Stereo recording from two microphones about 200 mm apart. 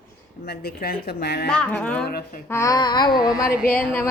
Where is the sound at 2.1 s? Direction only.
50° left (ahead or behind).